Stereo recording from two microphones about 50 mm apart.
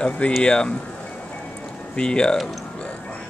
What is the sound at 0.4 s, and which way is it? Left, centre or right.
Speech, left.